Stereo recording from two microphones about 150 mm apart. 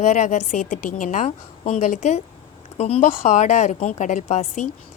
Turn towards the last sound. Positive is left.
turn(degrees=50)  # may be behind; listen again after turning